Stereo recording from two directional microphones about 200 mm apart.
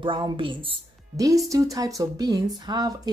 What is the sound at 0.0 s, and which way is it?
Speech, 25° right (ahead or behind).